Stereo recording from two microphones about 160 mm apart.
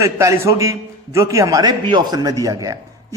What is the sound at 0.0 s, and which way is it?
A man's voice, 20° right (ahead or behind).